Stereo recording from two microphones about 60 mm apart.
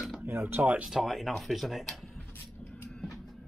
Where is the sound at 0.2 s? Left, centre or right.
Right.